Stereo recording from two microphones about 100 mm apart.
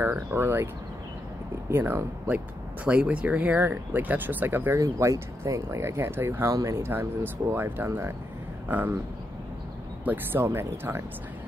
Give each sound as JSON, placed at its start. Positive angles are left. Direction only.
{"t": 0.0, "sound": "speech", "side_deg": -20}
{"t": 1.7, "sound": "speech", "side_deg": -25}
{"t": 4.7, "sound": "speech", "side_deg": -30}
{"t": 10.0, "sound": "speech", "side_deg": -20}